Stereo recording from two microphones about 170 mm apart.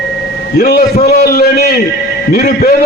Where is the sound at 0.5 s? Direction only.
65° left (ahead or behind).